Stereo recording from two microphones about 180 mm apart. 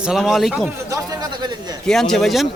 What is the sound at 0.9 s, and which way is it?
Speech, 20° right (ahead or behind).